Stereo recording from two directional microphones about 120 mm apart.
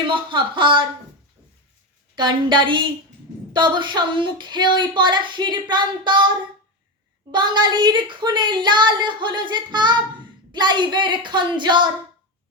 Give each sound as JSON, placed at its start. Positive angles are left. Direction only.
{"t": 0.1, "sound": "speech", "side_deg": -45}
{"t": 2.1, "sound": "a woman's voice", "side_deg": -40}